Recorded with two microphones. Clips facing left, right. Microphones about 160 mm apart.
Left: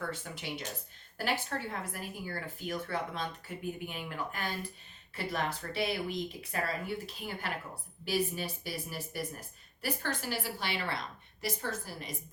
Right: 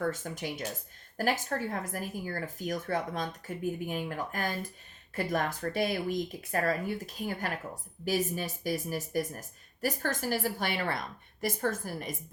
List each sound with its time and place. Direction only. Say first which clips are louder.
0.0 s speech: right 6 dB; 45° right (ahead or behind)